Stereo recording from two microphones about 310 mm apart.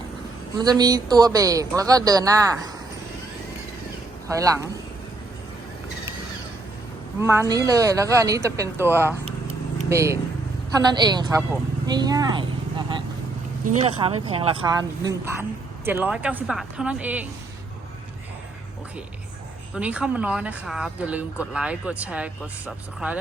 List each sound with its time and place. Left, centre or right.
0.6 s speech: centre
4.3 s speech: centre
7.2 s speech: centre
13.7 s speech: right; by 17.2 s centre
19.7 s speech: centre